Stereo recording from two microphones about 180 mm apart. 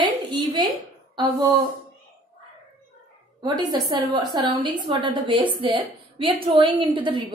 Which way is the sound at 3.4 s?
25° right (ahead or behind).